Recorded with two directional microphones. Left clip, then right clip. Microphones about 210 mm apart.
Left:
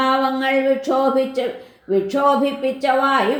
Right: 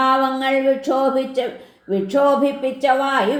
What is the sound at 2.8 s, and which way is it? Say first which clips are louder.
Speech: even; 30° right (ahead or behind).